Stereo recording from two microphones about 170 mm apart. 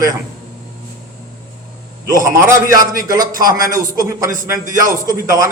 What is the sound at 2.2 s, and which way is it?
A man's voice, 15° right (ahead or behind).